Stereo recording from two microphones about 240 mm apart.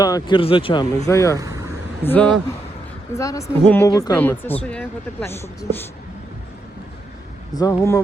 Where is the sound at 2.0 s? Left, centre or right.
Centre.